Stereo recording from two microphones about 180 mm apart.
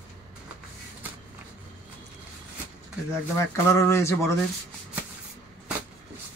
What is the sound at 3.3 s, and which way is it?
Speech, 15° left (ahead or behind).